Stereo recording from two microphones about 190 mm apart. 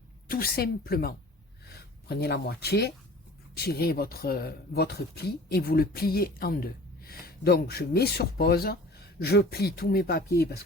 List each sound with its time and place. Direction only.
0.3 s speech: 50° left (ahead or behind)